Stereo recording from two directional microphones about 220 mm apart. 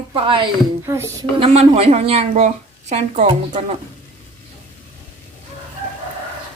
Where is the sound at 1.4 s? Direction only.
25° right (ahead or behind).